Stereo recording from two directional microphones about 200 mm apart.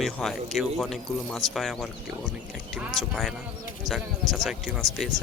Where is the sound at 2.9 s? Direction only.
Centre (ahead or behind).